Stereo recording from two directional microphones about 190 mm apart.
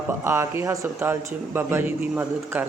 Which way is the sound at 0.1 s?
15° right (ahead or behind).